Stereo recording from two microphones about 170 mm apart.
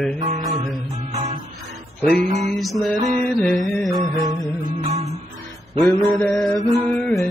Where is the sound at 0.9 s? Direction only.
35° right (ahead or behind).